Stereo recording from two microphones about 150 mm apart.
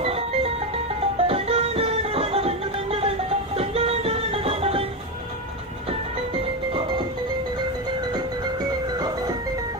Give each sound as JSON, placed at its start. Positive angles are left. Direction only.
{"t": 0.0, "sound": "music", "side_deg": -40}